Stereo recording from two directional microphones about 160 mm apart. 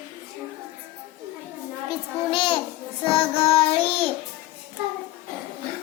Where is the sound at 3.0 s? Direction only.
35° left (ahead or behind).